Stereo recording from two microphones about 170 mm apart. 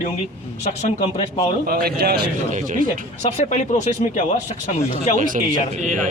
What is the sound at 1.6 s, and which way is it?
Speech, 65° right (ahead or behind).